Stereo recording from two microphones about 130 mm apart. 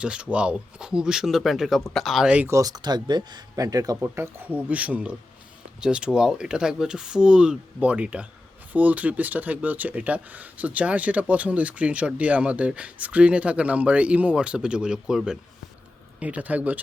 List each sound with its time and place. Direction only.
0.0 s speech: 10° right (ahead or behind)
2.5 s speech: 25° right (ahead or behind)
4.0 s speech: 20° right (ahead or behind)